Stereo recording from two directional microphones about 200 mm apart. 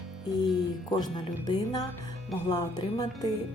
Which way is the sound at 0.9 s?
20° left (ahead or behind).